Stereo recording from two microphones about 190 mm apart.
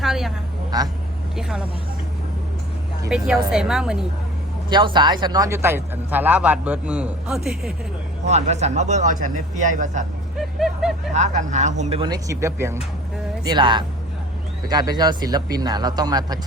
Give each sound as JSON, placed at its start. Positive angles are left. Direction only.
{"t": 0.0, "sound": "a sound", "side_deg": 0}
{"t": 0.7, "sound": "speech", "side_deg": -20}
{"t": 1.4, "sound": "a woman's voice", "side_deg": -5}
{"t": 3.1, "sound": "a woman's voice", "side_deg": -5}
{"t": 4.7, "sound": "speech", "side_deg": -25}
{"t": 8.2, "sound": "speech", "side_deg": -35}
{"t": 10.3, "sound": "a sound", "side_deg": 0}
{"t": 11.1, "sound": "speech", "side_deg": -40}
{"t": 12.0, "sound": "speech", "side_deg": -20}